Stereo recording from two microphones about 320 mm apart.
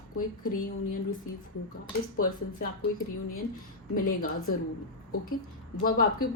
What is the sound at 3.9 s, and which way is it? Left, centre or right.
Speech, left.